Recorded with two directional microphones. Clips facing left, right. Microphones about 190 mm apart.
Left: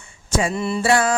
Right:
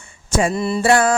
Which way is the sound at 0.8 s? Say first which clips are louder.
Right 3 dB; 55° right (ahead or behind).